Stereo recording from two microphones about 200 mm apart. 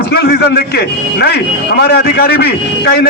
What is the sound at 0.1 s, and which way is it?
A man's voice, 50° left (ahead or behind).